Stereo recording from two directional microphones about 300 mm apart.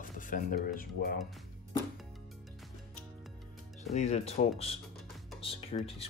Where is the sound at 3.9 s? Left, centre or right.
Left.